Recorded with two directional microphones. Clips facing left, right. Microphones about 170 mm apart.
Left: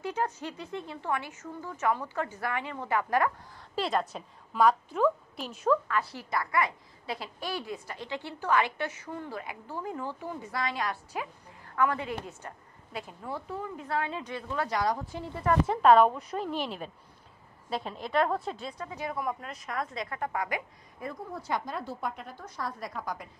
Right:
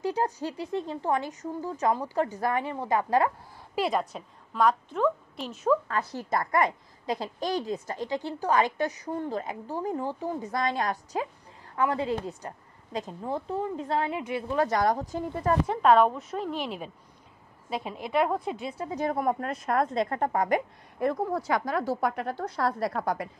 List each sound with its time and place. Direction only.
0.0 s a woman's voice: 35° right (ahead or behind)
3.7 s a woman's voice: 5° right (ahead or behind)
6.3 s a child's voice: 45° right (ahead or behind)
11.7 s a woman's voice: 15° right (ahead or behind)
12.0 s a woman's voice: 35° right (ahead or behind)
14.1 s a woman's voice: 10° right (ahead or behind)
14.7 s a child's voice: 50° right (ahead or behind)
15.6 s a woman's voice: centre (ahead or behind)
18.9 s a child's voice: 50° right (ahead or behind)
20.0 s a child's voice: 40° right (ahead or behind)
21.0 s a woman's voice: 65° right (ahead or behind)
21.5 s a woman's voice: 90° right; by 23.3 s 65° right (ahead or behind)